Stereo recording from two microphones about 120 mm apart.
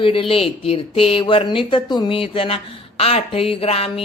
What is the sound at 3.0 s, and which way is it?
Speech, 55° left (ahead or behind).